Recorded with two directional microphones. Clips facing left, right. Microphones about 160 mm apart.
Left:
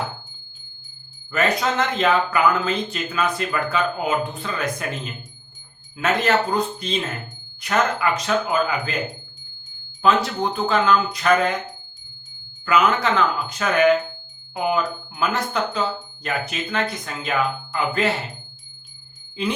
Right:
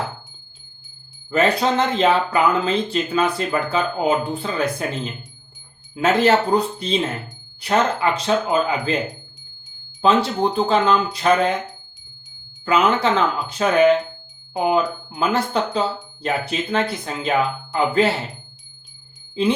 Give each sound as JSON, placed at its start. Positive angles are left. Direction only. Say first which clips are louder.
{"t": 1.3, "sound": "speech", "louder": "right 4 dB", "side_deg": -30}
{"t": 6.0, "sound": "speech", "louder": "right 4 dB", "side_deg": -30}
{"t": 10.0, "sound": "speech", "louder": "right 2 dB", "side_deg": -30}
{"t": 12.6, "sound": "speech", "louder": "right 1 dB", "side_deg": -30}